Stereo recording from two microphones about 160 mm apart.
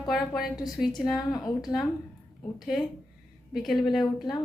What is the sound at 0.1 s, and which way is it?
Speech, 5° right (ahead or behind).